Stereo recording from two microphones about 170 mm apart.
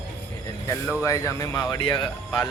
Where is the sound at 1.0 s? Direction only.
20° left (ahead or behind).